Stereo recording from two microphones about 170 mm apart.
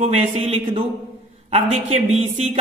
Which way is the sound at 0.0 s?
35° right (ahead or behind).